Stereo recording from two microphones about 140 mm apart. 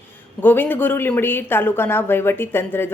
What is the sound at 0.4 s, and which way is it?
Speech, 15° left (ahead or behind).